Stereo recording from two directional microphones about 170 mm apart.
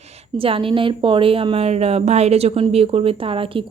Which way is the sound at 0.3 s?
35° right (ahead or behind).